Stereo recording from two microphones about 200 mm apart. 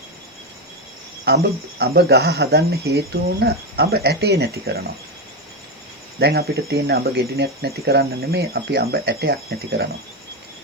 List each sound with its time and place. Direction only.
1.3 s speech: 55° right (ahead or behind)
6.1 s speech: 55° right (ahead or behind)